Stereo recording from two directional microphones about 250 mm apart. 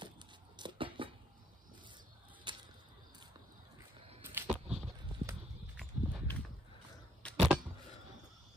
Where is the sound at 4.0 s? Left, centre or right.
Right.